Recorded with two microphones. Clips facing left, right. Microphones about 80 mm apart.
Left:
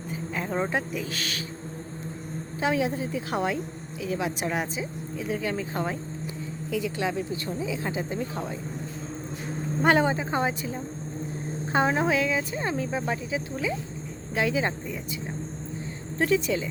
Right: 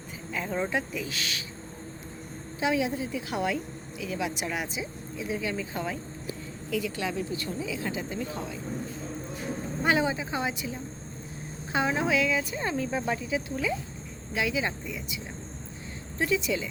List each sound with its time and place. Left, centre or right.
0.5 s speech: left
2.6 s speech: left
6.7 s speech: left
9.8 s a woman's voice: left
12.4 s speech: left
14.3 s a woman's voice: left